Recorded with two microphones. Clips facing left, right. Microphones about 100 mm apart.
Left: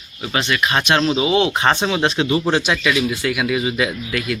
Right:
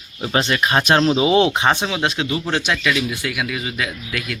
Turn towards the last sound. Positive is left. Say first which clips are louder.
# left 5 dB
turn(degrees=10)  # may be behind; listen again after turning